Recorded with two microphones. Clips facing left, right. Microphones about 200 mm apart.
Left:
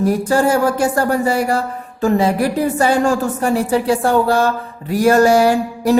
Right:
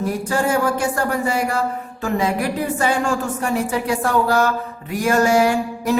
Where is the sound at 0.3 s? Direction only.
35° left (ahead or behind).